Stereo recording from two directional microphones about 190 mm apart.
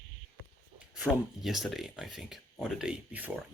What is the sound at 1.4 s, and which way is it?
Speech, centre (ahead or behind).